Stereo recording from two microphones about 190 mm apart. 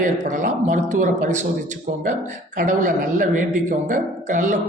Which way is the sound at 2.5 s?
40° right (ahead or behind).